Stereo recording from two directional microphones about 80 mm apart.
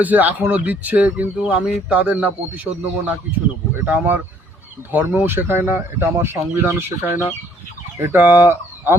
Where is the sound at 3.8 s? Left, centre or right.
Right.